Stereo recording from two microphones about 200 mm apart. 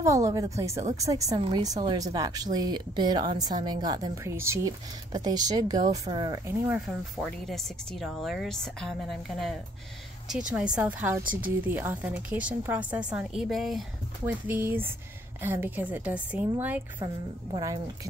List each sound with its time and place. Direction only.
0.0 s a woman's voice: 15° right (ahead or behind)
6.7 s speech: centre (ahead or behind)
10.5 s a woman's voice: 5° right (ahead or behind)